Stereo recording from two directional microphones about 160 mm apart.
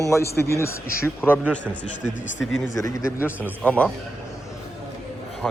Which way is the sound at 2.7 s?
20° left (ahead or behind).